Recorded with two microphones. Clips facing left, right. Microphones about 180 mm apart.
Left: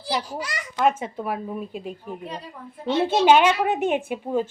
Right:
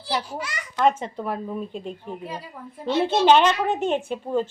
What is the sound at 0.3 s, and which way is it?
Speech, 35° left (ahead or behind).